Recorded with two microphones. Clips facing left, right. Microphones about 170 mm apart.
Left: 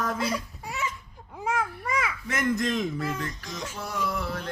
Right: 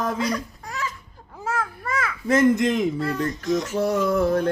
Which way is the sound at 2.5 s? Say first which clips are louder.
Right 6 dB; 20° right (ahead or behind).